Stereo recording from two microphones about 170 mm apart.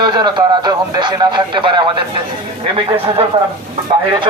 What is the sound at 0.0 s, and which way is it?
Speech, 25° right (ahead or behind).